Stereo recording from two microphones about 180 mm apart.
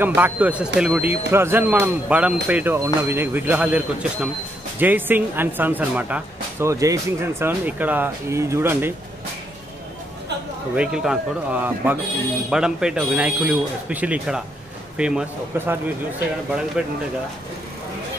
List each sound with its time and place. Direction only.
0.0 s speech: 10° right (ahead or behind)
10.8 s a man's voice: 5° right (ahead or behind)